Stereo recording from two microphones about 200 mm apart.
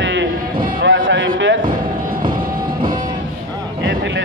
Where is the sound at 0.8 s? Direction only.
70° right (ahead or behind).